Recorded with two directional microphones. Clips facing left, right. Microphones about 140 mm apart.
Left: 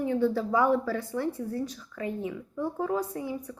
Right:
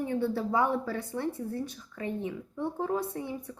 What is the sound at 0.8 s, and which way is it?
Speech, 25° right (ahead or behind).